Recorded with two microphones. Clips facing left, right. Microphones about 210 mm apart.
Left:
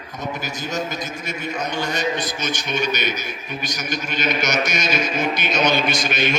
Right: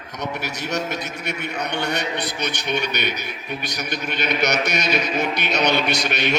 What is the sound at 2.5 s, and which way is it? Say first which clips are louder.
Speech: left 2 dB; 65° right (ahead or behind).